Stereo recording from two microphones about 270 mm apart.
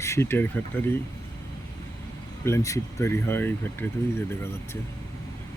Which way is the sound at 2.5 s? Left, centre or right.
Centre.